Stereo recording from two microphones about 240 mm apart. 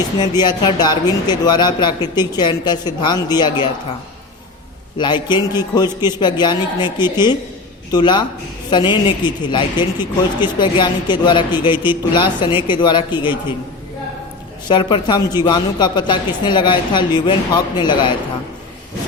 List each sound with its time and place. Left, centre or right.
0.2 s speech: centre
4.9 s speech: centre
14.7 s speech: centre